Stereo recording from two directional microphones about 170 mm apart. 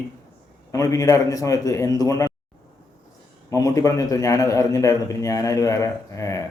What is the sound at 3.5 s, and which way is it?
A man's voice, 20° left (ahead or behind).